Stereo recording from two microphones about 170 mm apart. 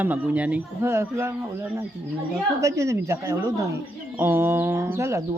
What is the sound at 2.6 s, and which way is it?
Speech, 20° right (ahead or behind).